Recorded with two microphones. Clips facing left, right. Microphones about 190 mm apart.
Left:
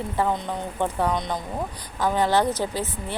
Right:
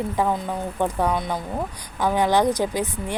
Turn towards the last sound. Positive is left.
turn(degrees=-15)  # may be behind; listen again after turning